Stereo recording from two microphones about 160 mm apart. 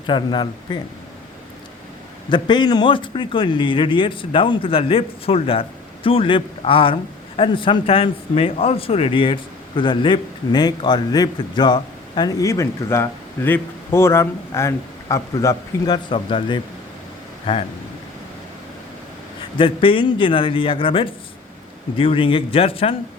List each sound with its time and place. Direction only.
0.1 s speech: 30° left (ahead or behind)
2.3 s speech: 25° left (ahead or behind)
19.5 s speech: 35° left (ahead or behind)